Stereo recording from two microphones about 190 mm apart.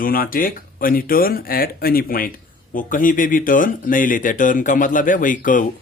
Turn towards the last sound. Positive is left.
turn(degrees=45)  # may be behind; listen again after turning